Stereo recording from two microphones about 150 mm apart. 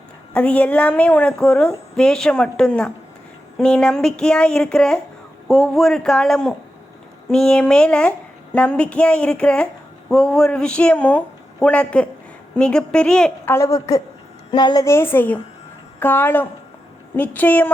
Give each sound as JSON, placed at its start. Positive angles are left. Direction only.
{"t": 0.3, "sound": "a woman's voice", "side_deg": 10}
{"t": 3.6, "sound": "a sound", "side_deg": 5}
{"t": 7.3, "sound": "a woman's voice", "side_deg": 5}